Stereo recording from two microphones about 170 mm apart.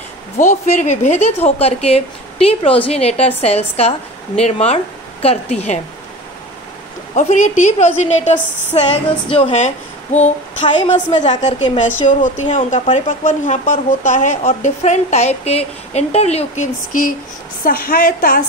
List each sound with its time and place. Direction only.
0.4 s speech: 45° left (ahead or behind)
7.2 s a woman's voice: 45° left (ahead or behind)
10.1 s a woman's voice: 45° left (ahead or behind)
16.9 s a woman's voice: 50° left (ahead or behind)